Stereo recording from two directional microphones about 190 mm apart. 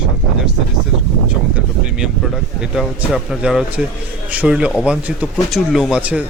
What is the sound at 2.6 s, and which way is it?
A man's voice, 5° right (ahead or behind).